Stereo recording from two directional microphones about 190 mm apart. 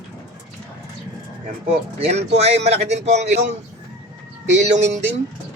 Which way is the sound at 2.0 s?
35° right (ahead or behind).